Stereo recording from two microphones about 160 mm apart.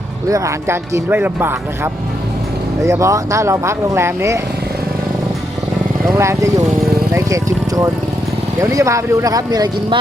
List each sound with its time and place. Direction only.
0.3 s speech: 20° right (ahead or behind)
6.1 s speech: 20° right (ahead or behind)